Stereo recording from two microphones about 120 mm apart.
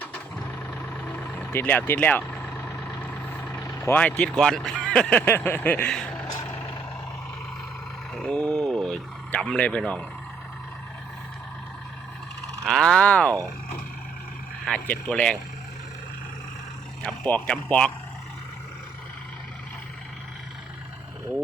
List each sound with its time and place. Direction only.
0.0 s vehicle: 10° left (ahead or behind)
1.4 s speech: 15° left (ahead or behind)
2.3 s vehicle: centre (ahead or behind)
2.6 s vehicle: 15° left (ahead or behind)
3.6 s vehicle: 25° left (ahead or behind)
4.0 s speech: 5° left (ahead or behind)
5.2 s speech: 20° left (ahead or behind)
6.5 s vehicle: 15° left (ahead or behind)
8.1 s speech: 5° left (ahead or behind)
12.6 s speech: 5° left (ahead or behind)
14.8 s speech: 10° left (ahead or behind)
17.0 s speech: 10° left (ahead or behind)